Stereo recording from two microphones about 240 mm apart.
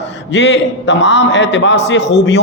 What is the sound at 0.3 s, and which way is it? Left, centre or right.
A man's voice, left.